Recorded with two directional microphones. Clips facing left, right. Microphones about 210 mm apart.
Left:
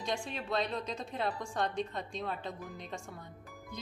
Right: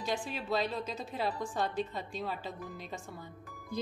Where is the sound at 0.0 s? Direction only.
5° right (ahead or behind).